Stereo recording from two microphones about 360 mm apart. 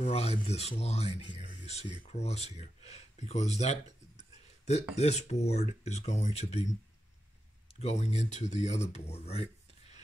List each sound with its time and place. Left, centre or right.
0.0 s speech: centre
7.6 s speech: centre